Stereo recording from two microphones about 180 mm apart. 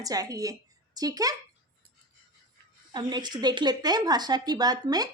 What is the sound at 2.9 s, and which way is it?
A woman's voice, 25° right (ahead or behind).